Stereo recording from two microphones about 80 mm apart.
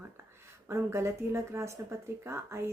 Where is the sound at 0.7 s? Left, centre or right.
Right.